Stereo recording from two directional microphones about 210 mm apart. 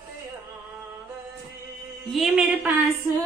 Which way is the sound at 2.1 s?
5° right (ahead or behind).